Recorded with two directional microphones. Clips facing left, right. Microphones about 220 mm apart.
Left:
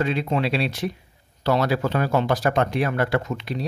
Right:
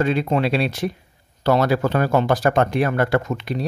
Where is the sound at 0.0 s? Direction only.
50° right (ahead or behind).